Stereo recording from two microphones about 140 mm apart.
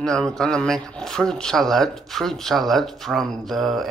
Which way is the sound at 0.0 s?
5° left (ahead or behind).